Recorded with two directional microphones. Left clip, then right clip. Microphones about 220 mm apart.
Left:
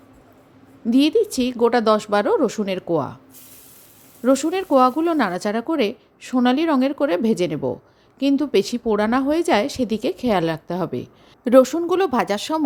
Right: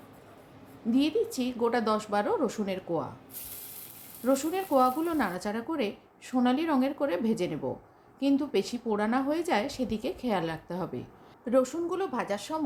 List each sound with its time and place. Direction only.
0.9 s a woman's voice: 35° left (ahead or behind)
4.2 s a woman's voice: 35° left (ahead or behind)